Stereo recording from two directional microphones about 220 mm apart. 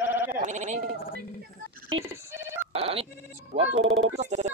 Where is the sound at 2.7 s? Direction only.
25° right (ahead or behind).